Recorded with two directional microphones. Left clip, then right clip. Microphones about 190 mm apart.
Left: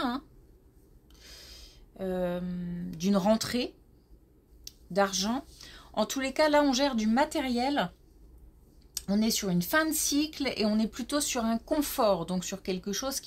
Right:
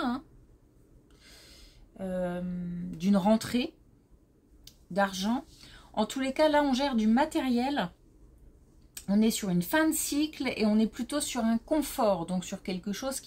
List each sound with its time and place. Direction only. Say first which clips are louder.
1.2 s a sound: left 5 dB; 40° left (ahead or behind)
3.0 s speech: even; 35° left (ahead or behind)
4.6 s speech: left 1 dB; 35° left (ahead or behind)
8.9 s speech: right 1 dB; 35° left (ahead or behind)